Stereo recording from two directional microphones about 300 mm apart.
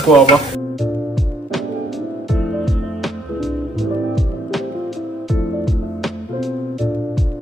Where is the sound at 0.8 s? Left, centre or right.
Centre.